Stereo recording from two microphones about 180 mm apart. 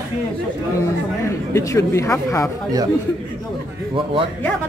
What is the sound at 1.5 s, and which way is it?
A woman's voice, 15° left (ahead or behind).